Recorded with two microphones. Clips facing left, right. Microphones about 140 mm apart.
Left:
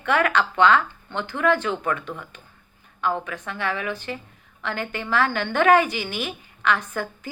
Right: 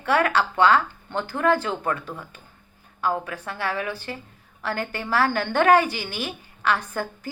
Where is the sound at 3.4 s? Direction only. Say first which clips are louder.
Even; 35° right (ahead or behind).